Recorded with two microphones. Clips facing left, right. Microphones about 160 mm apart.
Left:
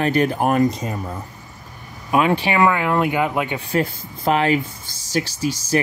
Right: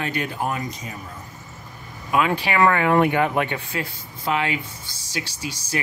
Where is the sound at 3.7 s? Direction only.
45° left (ahead or behind).